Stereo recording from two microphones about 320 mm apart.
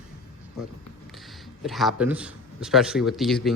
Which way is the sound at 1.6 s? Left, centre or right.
Centre.